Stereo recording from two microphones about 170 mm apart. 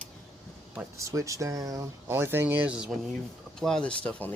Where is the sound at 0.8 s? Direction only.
20° right (ahead or behind).